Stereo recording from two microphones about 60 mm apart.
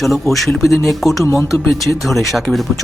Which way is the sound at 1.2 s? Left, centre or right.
Left.